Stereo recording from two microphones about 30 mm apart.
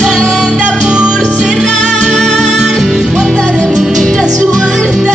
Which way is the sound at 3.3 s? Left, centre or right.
Left.